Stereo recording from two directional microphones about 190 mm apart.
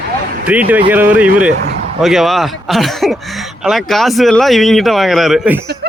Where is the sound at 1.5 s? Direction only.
55° right (ahead or behind).